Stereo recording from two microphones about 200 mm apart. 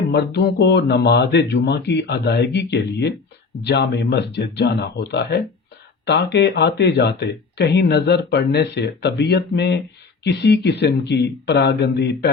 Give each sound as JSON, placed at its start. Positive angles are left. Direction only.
{"t": 0.1, "sound": "speech", "side_deg": 55}